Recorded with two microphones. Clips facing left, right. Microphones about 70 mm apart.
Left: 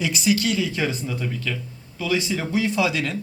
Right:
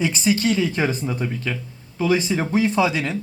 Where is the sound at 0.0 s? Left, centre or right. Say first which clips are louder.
Right 2 dB; right.